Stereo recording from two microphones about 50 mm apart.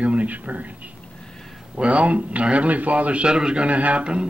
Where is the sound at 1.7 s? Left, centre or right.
Right.